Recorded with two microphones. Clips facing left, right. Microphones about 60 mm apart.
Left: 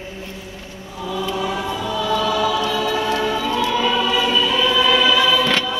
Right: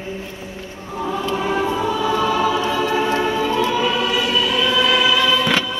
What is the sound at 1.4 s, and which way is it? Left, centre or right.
Choir, right.